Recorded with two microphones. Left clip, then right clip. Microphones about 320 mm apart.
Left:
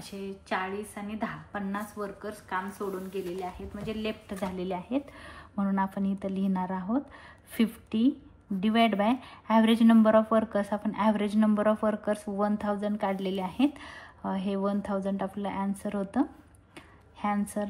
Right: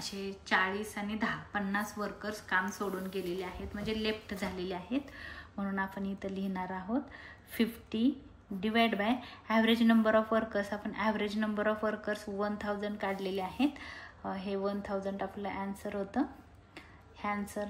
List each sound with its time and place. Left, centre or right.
0.0 s a woman's voice: centre
3.8 s a woman's voice: centre